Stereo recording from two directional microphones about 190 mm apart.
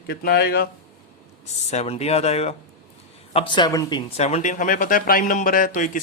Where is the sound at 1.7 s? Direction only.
35° left (ahead or behind).